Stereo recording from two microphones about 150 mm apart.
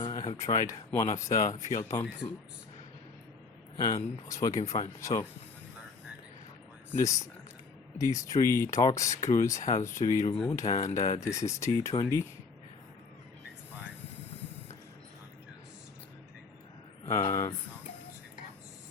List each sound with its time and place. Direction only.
0.0 s a sound: 25° left (ahead or behind)
0.9 s speech: 20° left (ahead or behind)
3.8 s speech: 25° left (ahead or behind)
6.9 s speech: 20° left (ahead or behind)
17.1 s speech: 25° left (ahead or behind)